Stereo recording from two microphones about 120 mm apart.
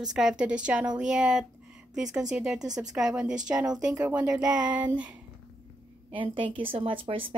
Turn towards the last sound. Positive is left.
turn(degrees=-50)  # may be behind; listen again after turning